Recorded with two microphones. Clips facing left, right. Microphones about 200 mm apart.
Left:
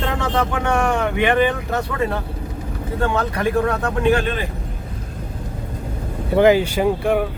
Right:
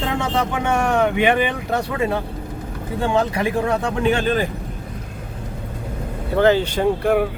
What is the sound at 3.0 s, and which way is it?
Speech, 15° right (ahead or behind).